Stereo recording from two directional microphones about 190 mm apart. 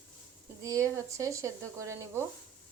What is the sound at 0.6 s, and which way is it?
Speech, 15° right (ahead or behind).